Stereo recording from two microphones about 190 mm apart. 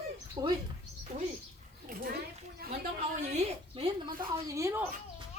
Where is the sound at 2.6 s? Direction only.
50° right (ahead or behind).